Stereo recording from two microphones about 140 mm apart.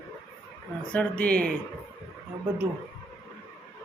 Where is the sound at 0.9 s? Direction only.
10° left (ahead or behind).